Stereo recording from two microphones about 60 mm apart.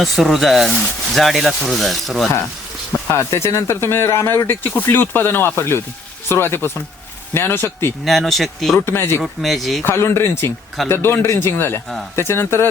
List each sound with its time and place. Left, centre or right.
0.0 s speech: centre
2.9 s a sound: left
3.3 s speech: left
4.4 s speech: left
8.0 s speech: centre
8.9 s speech: left
9.2 s speech: centre
9.8 s speech: left